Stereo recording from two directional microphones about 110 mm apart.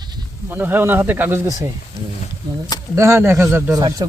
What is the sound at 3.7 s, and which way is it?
Speech, 40° right (ahead or behind).